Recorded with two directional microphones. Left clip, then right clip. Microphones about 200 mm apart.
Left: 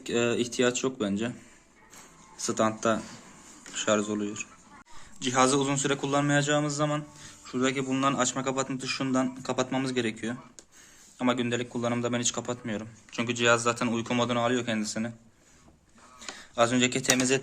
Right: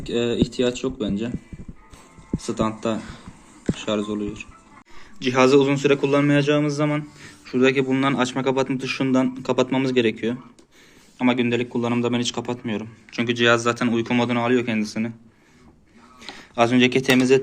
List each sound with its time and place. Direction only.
0.1 s a man's voice: 15° left (ahead or behind)
0.3 s speech: 55° left (ahead or behind)
0.6 s a man's voice: 15° left (ahead or behind)
2.6 s a man's voice: 15° left (ahead or behind)
4.1 s a man's voice: 15° left (ahead or behind)
16.3 s speech: 5° left (ahead or behind)